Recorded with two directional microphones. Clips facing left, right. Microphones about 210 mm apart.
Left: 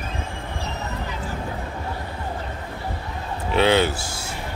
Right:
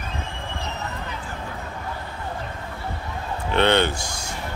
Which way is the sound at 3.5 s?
5° left (ahead or behind).